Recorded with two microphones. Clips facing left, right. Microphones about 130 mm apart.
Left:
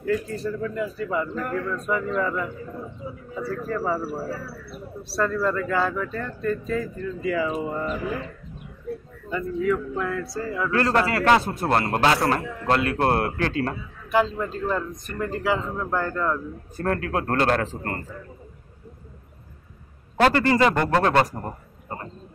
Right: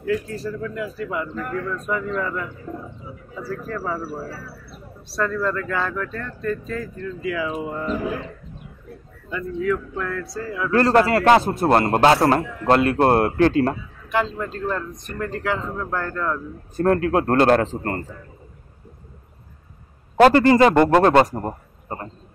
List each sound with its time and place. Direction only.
0.0 s speech: centre (ahead or behind)
3.4 s speech: centre (ahead or behind)
9.3 s speech: centre (ahead or behind)
10.7 s a man's voice: 35° right (ahead or behind)
14.1 s speech: centre (ahead or behind)
16.7 s a man's voice: 30° right (ahead or behind)
20.3 s a man's voice: 30° right (ahead or behind)
21.4 s a sound: 30° right (ahead or behind)